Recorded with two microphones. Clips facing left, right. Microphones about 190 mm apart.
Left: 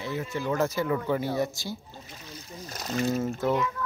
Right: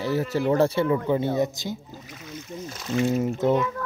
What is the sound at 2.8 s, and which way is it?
Speech, 40° left (ahead or behind).